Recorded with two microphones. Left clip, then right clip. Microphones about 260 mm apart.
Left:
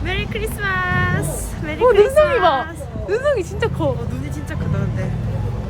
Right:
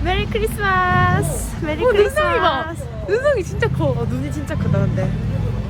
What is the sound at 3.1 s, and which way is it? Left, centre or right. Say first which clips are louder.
Speech: right 1 dB; centre.